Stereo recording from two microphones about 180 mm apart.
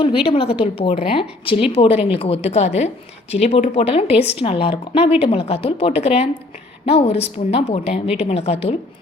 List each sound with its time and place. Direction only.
0.3 s a woman's voice: 30° left (ahead or behind)